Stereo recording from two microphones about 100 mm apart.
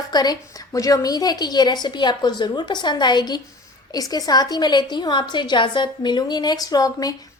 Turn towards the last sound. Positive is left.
turn(degrees=40)  # may be behind; listen again after turning